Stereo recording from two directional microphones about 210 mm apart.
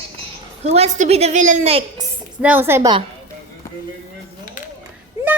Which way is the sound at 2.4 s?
10° right (ahead or behind).